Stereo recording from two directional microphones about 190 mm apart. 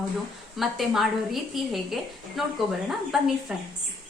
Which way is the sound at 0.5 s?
Centre (ahead or behind).